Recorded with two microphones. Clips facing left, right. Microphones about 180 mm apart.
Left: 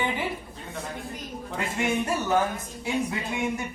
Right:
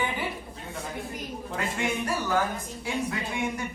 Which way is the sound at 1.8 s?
25° left (ahead or behind).